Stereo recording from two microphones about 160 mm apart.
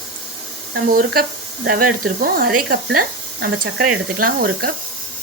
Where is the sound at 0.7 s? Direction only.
65° right (ahead or behind).